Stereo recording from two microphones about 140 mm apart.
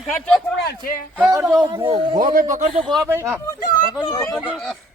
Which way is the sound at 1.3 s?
25° right (ahead or behind).